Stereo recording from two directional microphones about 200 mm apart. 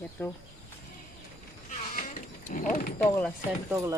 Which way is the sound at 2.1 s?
40° left (ahead or behind).